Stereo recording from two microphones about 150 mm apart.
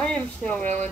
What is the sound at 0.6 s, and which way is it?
Speech, 50° right (ahead or behind).